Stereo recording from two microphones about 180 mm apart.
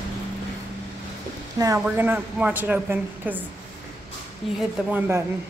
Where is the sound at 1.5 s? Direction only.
20° right (ahead or behind).